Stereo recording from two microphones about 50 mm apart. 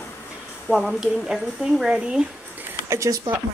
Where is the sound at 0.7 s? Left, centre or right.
Centre.